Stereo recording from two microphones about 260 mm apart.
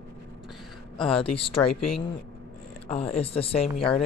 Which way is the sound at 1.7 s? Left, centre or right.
Left.